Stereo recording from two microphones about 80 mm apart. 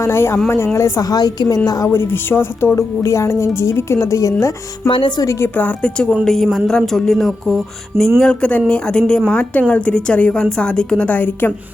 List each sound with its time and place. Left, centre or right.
0.0 s a woman's voice: left
1.0 s a woman's voice: left
1.9 s a woman's voice: left
4.9 s speech: left
5.2 s a woman's voice: left
5.5 s a woman's voice: centre
8.2 s a woman's voice: centre